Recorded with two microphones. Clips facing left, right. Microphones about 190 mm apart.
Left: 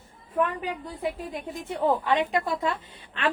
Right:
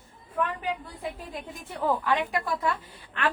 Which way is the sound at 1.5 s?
25° left (ahead or behind).